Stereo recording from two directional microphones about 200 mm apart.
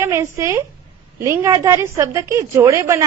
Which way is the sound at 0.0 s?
15° right (ahead or behind).